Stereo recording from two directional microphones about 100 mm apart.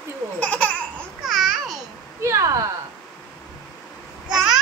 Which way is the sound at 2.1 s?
30° right (ahead or behind).